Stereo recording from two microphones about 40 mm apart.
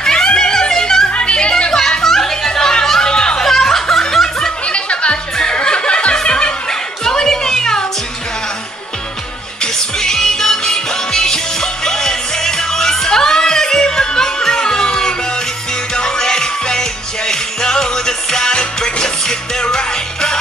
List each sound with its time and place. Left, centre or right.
0.0 s a sound: centre
1.0 s music: left
3.4 s snicker: centre
4.1 s music: centre
4.6 s music: left
7.1 s a sound: centre
9.6 s music: centre